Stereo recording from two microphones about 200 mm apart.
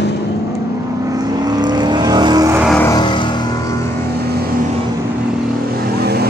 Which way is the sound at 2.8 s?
20° left (ahead or behind).